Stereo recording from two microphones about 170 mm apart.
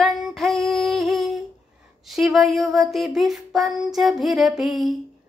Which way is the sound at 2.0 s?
Centre (ahead or behind).